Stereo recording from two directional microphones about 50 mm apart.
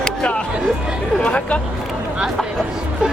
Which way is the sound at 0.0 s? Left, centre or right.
Centre.